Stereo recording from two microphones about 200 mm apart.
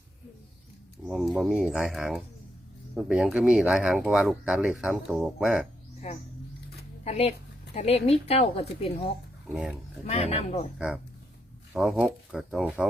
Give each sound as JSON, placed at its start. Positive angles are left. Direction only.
{"t": 1.0, "sound": "speech", "side_deg": 0}
{"t": 7.0, "sound": "a woman's voice", "side_deg": 30}
{"t": 9.5, "sound": "speech", "side_deg": -5}
{"t": 10.1, "sound": "speech", "side_deg": 30}
{"t": 10.8, "sound": "speech", "side_deg": -5}